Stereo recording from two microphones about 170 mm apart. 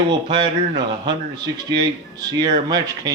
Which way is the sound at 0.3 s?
30° right (ahead or behind).